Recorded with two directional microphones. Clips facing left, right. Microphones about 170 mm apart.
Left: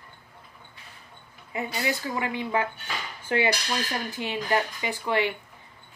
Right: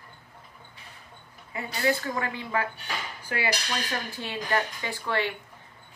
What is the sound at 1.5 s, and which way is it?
Speech, 15° left (ahead or behind).